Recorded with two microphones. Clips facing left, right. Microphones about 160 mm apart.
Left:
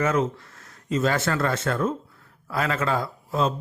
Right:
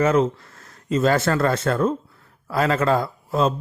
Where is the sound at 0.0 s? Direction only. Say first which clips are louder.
Right 5 dB; 30° right (ahead or behind).